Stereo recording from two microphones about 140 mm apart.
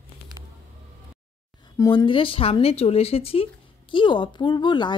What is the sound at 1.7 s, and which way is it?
Speech, 30° left (ahead or behind).